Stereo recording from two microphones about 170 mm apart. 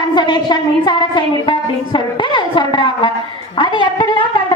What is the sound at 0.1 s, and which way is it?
A woman's voice, 25° left (ahead or behind).